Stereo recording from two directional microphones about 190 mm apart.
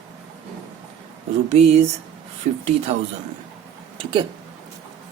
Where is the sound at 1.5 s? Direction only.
35° right (ahead or behind).